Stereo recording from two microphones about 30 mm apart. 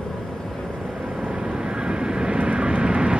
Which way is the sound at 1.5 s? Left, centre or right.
Right.